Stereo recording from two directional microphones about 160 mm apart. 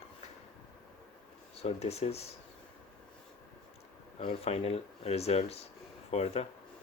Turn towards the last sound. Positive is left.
turn(degrees=40)  # may be behind; listen again after turning